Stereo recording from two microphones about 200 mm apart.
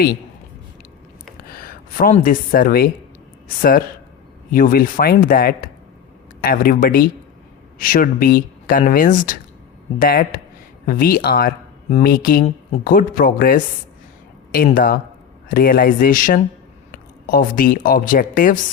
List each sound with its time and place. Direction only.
1.4 s speech: 45° left (ahead or behind)